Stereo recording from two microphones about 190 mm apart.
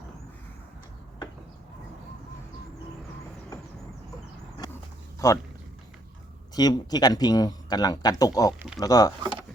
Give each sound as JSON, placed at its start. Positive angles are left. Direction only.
{"t": 5.2, "sound": "a man's voice", "side_deg": 15}
{"t": 6.5, "sound": "speech", "side_deg": 20}
{"t": 8.5, "sound": "speech", "side_deg": 0}
{"t": 8.8, "sound": "speech", "side_deg": 20}